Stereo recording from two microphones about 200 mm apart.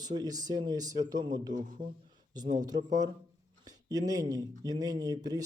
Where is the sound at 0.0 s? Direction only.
20° right (ahead or behind).